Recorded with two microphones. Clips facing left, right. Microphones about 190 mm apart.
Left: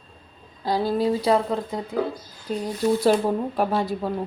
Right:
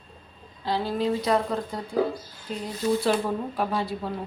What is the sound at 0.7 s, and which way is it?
Speech, 40° left (ahead or behind).